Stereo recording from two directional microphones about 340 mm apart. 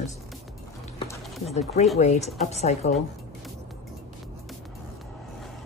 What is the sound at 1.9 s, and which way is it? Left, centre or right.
Speech, centre.